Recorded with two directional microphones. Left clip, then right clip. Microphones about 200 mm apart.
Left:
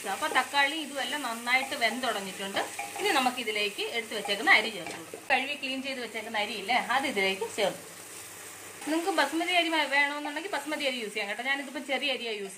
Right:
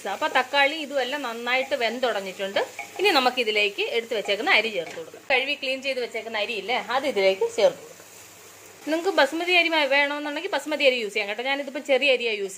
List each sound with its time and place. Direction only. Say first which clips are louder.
0.0 s a woman's voice: right 4 dB; 45° right (ahead or behind)
9.1 s speech: right 7 dB; 45° right (ahead or behind)